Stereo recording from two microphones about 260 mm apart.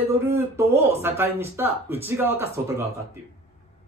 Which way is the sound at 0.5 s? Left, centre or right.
Centre.